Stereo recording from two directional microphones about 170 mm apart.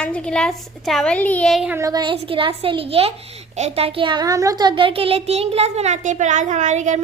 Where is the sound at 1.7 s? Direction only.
20° right (ahead or behind).